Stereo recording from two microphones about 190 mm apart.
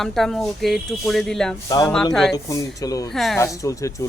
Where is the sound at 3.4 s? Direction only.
15° left (ahead or behind).